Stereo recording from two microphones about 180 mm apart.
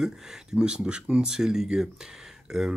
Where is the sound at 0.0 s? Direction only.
5° right (ahead or behind).